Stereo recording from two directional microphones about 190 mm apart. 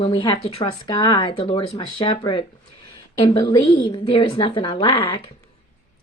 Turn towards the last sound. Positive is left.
turn(degrees=25)  # may be behind; listen again after turning